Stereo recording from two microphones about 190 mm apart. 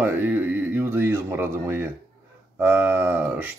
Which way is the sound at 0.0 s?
10° right (ahead or behind).